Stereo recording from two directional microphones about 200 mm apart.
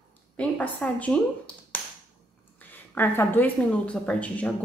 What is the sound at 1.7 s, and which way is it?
Tap, 10° left (ahead or behind).